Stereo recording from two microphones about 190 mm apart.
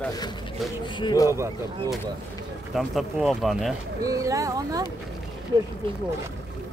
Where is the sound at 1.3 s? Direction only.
15° right (ahead or behind).